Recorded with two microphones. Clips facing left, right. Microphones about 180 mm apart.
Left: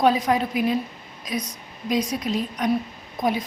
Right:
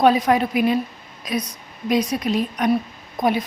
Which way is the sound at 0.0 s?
65° right (ahead or behind).